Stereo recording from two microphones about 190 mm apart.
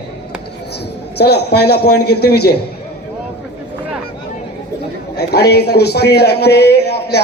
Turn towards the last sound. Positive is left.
turn(degrees=60)  # may be behind; listen again after turning